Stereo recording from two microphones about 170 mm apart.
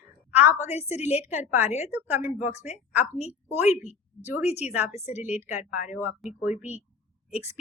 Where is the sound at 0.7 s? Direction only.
40° left (ahead or behind).